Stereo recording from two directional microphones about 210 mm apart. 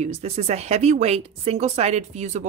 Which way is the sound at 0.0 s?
30° right (ahead or behind).